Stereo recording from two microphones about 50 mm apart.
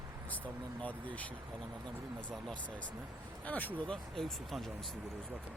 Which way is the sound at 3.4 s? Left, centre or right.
Left.